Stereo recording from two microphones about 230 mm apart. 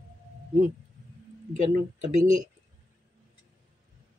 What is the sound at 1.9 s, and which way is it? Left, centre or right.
Speech, right.